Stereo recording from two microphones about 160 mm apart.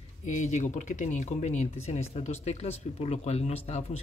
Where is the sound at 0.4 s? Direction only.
50° left (ahead or behind).